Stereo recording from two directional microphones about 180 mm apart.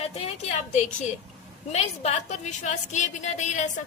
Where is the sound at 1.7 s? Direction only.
35° left (ahead or behind).